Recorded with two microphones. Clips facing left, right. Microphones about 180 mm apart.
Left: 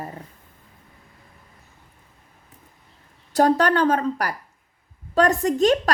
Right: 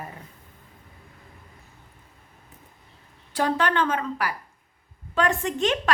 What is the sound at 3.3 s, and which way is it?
A woman's voice, 40° left (ahead or behind).